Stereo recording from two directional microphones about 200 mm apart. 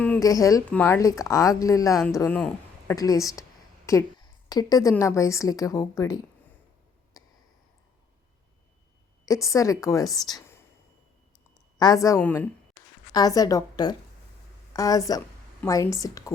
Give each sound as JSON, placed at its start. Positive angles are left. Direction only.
{"t": 0.0, "sound": "a woman's voice", "side_deg": 10}
{"t": 9.2, "sound": "a woman's voice", "side_deg": 15}
{"t": 11.8, "sound": "a woman's voice", "side_deg": 15}